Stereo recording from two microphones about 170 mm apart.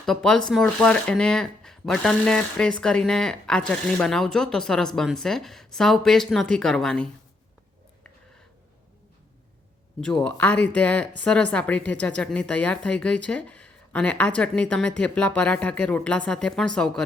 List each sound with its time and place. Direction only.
0.0 s speech: 5° left (ahead or behind)
10.2 s speech: 10° left (ahead or behind)